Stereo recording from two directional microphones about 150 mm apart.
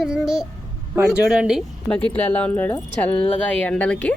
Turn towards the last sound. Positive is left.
turn(degrees=10)  # may be behind; listen again after turning